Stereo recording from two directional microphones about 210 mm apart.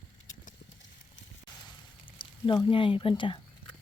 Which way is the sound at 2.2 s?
25° left (ahead or behind).